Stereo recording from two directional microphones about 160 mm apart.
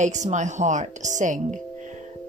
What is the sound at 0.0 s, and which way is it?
Speech, 50° right (ahead or behind).